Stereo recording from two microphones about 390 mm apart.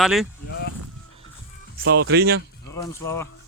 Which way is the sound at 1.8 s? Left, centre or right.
Right.